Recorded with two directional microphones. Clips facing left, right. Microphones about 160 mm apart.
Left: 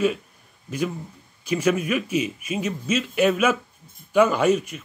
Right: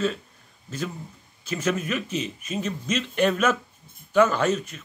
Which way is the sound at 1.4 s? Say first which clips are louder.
Left 5 dB; 10° left (ahead or behind).